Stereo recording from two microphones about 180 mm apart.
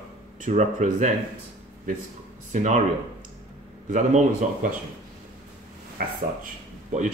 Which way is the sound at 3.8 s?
45° right (ahead or behind).